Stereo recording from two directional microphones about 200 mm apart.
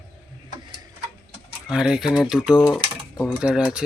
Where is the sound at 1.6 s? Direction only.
5° right (ahead or behind).